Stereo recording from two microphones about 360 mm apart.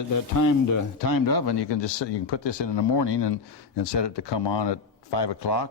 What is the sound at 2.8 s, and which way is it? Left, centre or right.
Speech, left.